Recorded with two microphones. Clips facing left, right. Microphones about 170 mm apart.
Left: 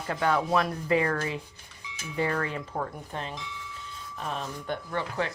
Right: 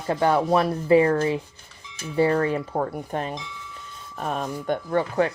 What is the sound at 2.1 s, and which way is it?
Speech, 30° right (ahead or behind).